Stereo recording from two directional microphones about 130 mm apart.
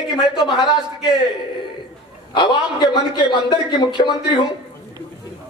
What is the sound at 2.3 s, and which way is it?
A man's voice, 35° left (ahead or behind).